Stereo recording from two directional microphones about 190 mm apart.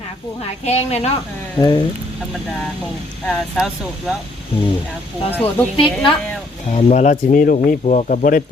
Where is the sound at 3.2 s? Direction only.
Centre (ahead or behind).